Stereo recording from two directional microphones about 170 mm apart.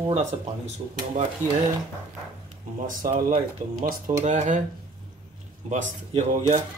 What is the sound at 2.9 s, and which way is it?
Speech, 55° right (ahead or behind).